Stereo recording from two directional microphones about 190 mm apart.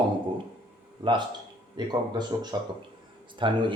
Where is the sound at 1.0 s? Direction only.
25° right (ahead or behind).